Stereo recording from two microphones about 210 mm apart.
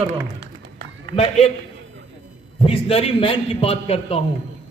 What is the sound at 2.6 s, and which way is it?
A man's voice, 25° left (ahead or behind).